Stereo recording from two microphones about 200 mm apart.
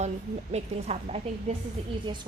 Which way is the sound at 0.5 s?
35° right (ahead or behind).